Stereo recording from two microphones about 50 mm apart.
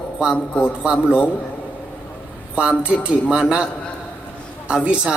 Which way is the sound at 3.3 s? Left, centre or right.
Centre.